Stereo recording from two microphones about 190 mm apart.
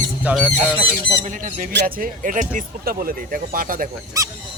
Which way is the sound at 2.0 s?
45° right (ahead or behind).